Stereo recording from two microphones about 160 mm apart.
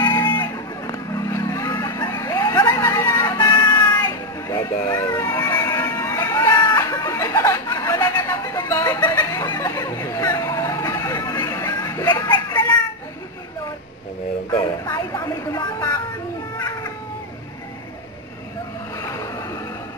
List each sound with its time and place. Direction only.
0.2 s a sound: 25° left (ahead or behind)
3.6 s music: 25° left (ahead or behind)
14.5 s speech: 25° left (ahead or behind)
16.5 s cat: 25° left (ahead or behind)
18.9 s vehicle: 20° left (ahead or behind)